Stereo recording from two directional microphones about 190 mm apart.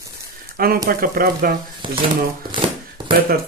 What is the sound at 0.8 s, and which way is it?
Speech, 50° right (ahead or behind).